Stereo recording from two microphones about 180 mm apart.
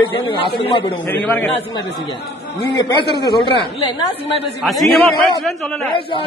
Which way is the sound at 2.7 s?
25° left (ahead or behind).